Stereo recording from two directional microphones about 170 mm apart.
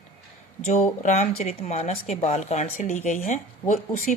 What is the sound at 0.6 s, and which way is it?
Speech, 45° left (ahead or behind).